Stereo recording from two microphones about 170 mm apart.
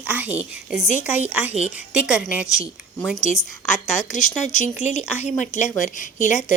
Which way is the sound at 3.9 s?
45° left (ahead or behind).